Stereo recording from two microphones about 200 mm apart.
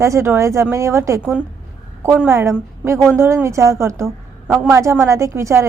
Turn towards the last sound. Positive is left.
turn(degrees=-15)  # may be behind; listen again after turning